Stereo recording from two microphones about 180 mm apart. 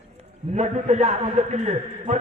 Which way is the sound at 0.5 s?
40° right (ahead or behind).